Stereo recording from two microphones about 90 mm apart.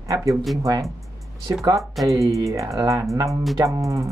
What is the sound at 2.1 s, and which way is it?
Speech, 35° right (ahead or behind).